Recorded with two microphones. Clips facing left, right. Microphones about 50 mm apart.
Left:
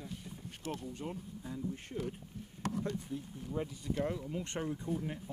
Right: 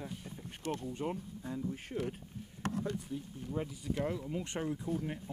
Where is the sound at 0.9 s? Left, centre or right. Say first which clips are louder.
Right 4 dB; centre.